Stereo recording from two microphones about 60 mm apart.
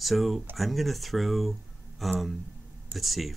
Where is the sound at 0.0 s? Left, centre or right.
Centre.